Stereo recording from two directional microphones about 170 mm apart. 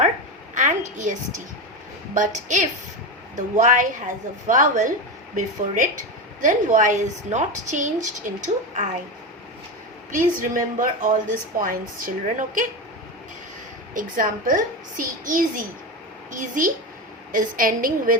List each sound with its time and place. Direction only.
0.5 s a sound: 45° right (ahead or behind)
2.1 s a woman's voice: 45° right (ahead or behind)
10.1 s a woman's voice: 55° right (ahead or behind)
13.9 s a woman's voice: 55° right (ahead or behind)